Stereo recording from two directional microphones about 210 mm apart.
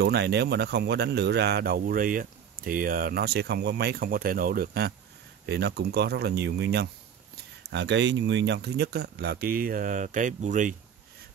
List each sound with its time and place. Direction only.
0.0 s speech: 50° right (ahead or behind); by 10.8 s 35° right (ahead or behind)